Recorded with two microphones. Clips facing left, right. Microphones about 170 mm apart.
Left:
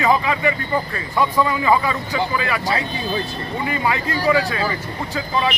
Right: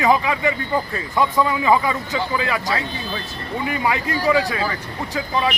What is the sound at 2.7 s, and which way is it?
Speech, 20° left (ahead or behind).